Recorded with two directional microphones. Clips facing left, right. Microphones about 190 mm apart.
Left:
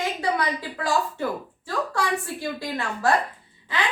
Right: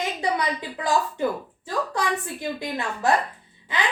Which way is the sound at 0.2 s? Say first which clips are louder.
Even; 20° right (ahead or behind).